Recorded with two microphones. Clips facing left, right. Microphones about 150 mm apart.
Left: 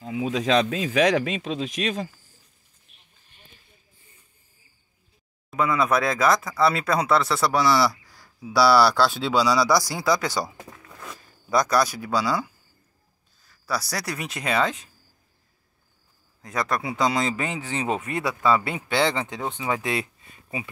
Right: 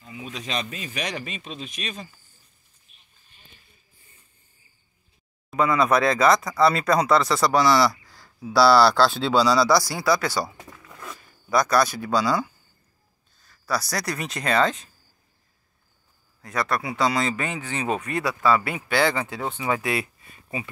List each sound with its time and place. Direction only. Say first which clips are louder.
0.0 s speech: left 11 dB; 90° left
2.9 s a sound: left 2 dB; 70° left (ahead or behind)
5.5 s speech: right 2 dB; centre (ahead or behind)
16.4 s speech: even; 20° left (ahead or behind)